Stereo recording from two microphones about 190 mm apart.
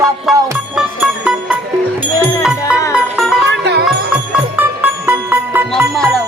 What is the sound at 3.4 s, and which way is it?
Music, 65° right (ahead or behind).